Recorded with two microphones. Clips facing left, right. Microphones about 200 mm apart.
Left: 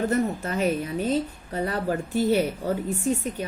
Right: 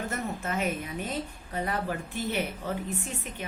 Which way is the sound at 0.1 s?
35° left (ahead or behind).